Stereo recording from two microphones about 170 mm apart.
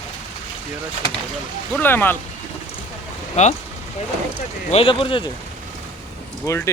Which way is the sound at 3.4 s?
40° left (ahead or behind).